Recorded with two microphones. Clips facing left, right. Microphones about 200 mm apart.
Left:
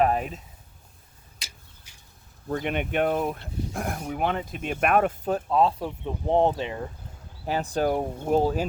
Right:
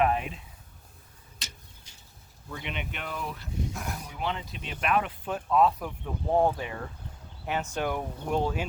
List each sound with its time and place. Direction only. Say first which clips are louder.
0.0 s a sound: left 3 dB; 40° left (ahead or behind)
2.5 s speech: left 10 dB; 50° left (ahead or behind); by 6.8 s 20° left (ahead or behind)
7.4 s speech: left 5 dB; 35° left (ahead or behind)